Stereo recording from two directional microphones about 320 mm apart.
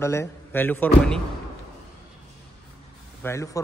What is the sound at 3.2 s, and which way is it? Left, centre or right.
Speech, centre.